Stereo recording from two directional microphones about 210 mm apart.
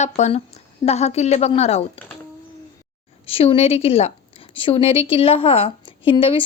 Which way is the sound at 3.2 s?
25° left (ahead or behind).